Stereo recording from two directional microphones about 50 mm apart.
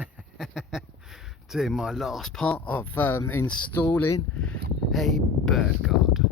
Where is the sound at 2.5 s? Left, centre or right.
Left.